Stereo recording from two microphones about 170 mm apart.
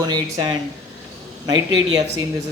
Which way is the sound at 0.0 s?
25° right (ahead or behind).